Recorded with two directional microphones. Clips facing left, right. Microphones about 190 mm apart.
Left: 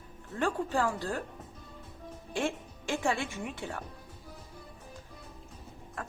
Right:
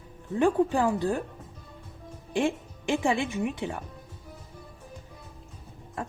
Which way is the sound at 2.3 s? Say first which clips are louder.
Right 6 dB; 15° right (ahead or behind).